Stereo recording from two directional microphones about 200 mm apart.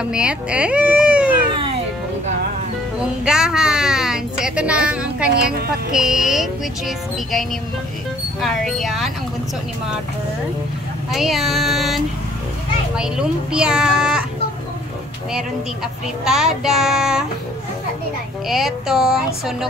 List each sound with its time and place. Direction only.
0.0 s speech: 5° right (ahead or behind)
3.3 s a woman's voice: 5° right (ahead or behind)
5.3 s speech: 50° right (ahead or behind)
5.9 s a woman's voice: centre (ahead or behind)
8.4 s a woman's voice: centre (ahead or behind)
11.1 s a woman's voice: centre (ahead or behind)
15.3 s a woman's voice: 5° right (ahead or behind)
18.5 s a woman's voice: centre (ahead or behind)